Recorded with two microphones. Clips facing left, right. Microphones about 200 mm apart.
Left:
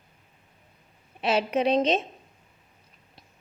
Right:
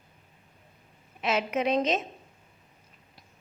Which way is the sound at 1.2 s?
30° left (ahead or behind).